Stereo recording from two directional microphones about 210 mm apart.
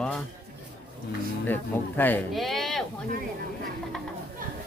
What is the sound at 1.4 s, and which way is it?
Speech, 10° left (ahead or behind).